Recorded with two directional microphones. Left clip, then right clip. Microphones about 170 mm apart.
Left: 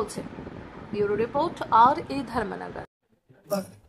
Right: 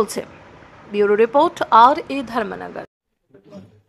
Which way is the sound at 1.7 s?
25° right (ahead or behind).